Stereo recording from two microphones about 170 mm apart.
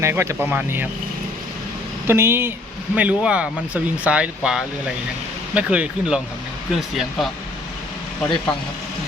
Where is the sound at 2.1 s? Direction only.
15° right (ahead or behind).